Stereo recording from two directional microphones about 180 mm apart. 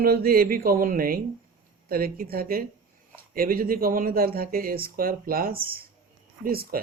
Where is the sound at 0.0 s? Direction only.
55° right (ahead or behind).